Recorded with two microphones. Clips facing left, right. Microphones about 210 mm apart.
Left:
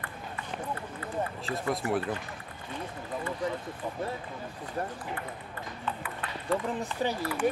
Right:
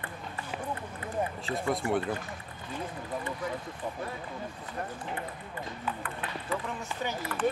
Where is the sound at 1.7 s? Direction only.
Centre (ahead or behind).